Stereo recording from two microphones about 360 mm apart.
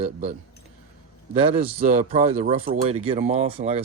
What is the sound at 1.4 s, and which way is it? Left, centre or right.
Speech, centre.